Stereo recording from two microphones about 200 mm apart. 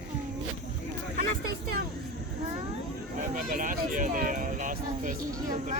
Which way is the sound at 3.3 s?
45° right (ahead or behind).